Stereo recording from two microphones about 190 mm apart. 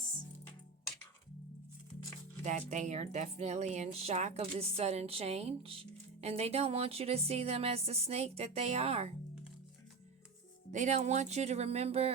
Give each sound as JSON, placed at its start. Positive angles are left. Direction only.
{"t": 2.4, "sound": "speech", "side_deg": -35}
{"t": 10.7, "sound": "speech", "side_deg": -40}